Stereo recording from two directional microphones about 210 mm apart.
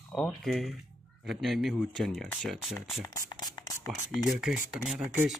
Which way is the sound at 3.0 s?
20° left (ahead or behind).